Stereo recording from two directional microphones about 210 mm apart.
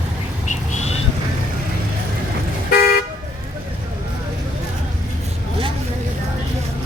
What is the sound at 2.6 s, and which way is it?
Car, 45° left (ahead or behind).